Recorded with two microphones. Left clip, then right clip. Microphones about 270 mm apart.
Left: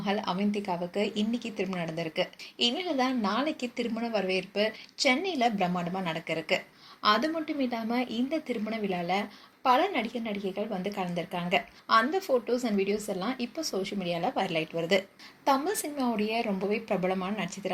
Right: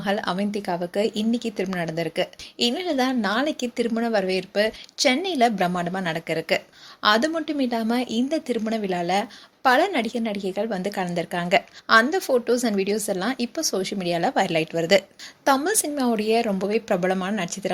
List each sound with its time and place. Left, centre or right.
0.0 s speech: right